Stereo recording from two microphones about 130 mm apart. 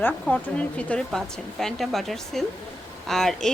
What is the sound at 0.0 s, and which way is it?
Speech, 10° left (ahead or behind).